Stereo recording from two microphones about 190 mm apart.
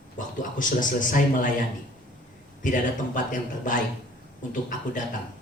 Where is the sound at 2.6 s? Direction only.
45° left (ahead or behind).